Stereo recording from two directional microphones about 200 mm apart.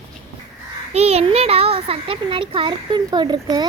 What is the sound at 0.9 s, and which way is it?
A child's voice, 30° right (ahead or behind).